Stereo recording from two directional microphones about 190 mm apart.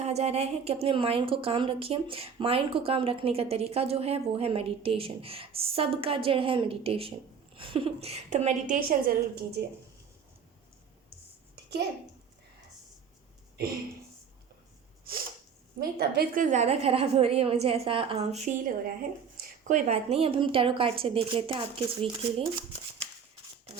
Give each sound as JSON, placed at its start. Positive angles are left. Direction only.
{"t": 0.0, "sound": "a woman's voice", "side_deg": -35}
{"t": 15.1, "sound": "a sound", "side_deg": -50}
{"t": 15.8, "sound": "a woman's voice", "side_deg": -55}